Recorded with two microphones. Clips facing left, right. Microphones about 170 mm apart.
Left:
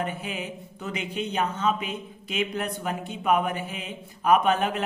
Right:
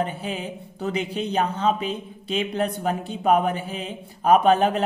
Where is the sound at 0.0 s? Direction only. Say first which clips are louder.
Right 4 dB; 30° right (ahead or behind).